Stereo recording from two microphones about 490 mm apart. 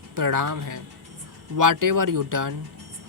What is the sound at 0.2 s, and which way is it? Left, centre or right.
Speech, right.